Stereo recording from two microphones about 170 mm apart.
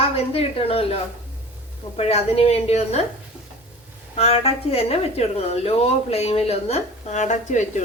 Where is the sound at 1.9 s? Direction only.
35° left (ahead or behind).